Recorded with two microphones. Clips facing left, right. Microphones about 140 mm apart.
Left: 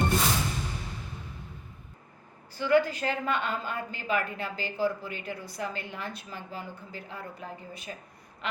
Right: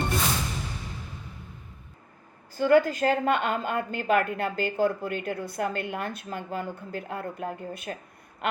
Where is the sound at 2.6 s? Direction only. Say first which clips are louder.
Right 4 dB; 45° right (ahead or behind).